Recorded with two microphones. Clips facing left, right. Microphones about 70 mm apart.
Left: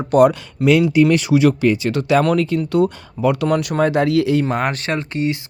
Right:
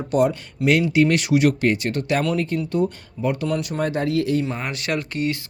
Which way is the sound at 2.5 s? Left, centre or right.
Left.